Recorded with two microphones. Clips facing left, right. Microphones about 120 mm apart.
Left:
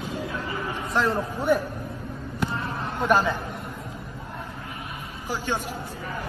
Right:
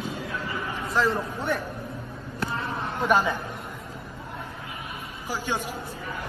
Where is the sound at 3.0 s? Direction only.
10° right (ahead or behind).